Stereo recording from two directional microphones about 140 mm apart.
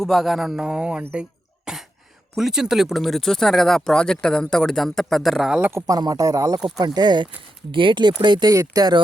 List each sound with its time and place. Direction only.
0.0 s speech: centre (ahead or behind)
5.7 s speech: 25° right (ahead or behind)